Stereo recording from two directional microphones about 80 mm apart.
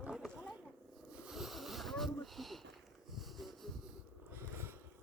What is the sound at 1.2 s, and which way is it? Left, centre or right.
Sniff, centre.